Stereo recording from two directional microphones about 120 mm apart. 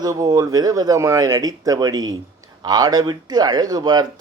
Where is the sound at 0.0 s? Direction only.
35° right (ahead or behind).